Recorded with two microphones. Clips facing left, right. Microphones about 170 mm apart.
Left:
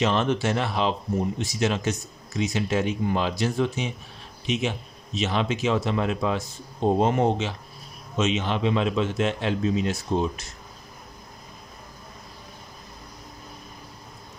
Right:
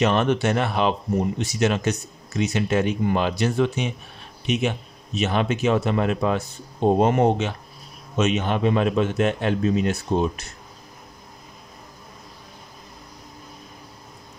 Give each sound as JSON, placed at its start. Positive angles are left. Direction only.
{"t": 0.0, "sound": "speech", "side_deg": -60}